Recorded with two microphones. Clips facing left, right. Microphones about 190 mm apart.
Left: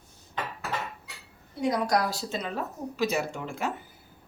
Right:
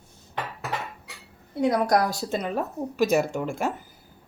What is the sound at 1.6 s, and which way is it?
Speech, 55° right (ahead or behind).